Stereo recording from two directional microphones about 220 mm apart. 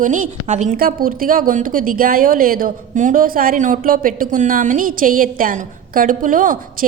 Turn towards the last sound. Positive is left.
turn(degrees=-35)  # may be behind; listen again after turning